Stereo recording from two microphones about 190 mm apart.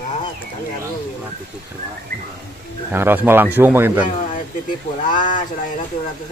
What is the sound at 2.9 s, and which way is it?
A man's voice, 10° right (ahead or behind).